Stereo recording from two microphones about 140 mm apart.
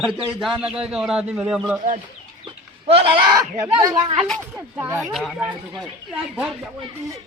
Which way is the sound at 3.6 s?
25° right (ahead or behind).